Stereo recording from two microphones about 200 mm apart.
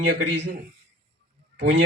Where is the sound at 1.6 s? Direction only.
65° right (ahead or behind).